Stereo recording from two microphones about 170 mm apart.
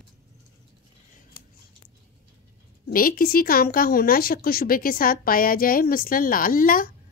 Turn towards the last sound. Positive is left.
turn(degrees=55)  # may be behind; listen again after turning